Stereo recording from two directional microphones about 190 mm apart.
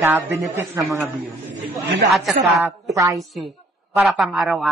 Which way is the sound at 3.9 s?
Centre (ahead or behind).